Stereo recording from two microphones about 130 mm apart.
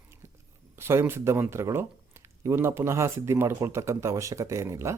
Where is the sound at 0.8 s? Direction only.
20° right (ahead or behind).